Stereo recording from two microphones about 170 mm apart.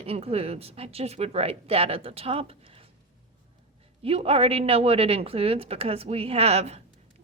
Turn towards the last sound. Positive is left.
turn(degrees=-40)  # may be behind; listen again after turning